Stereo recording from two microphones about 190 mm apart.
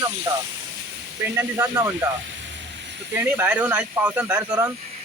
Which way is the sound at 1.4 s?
15° right (ahead or behind).